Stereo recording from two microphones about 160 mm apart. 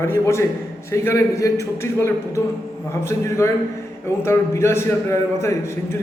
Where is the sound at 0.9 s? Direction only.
20° left (ahead or behind).